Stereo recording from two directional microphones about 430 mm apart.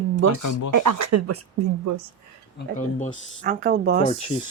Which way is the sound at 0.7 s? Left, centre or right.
Right.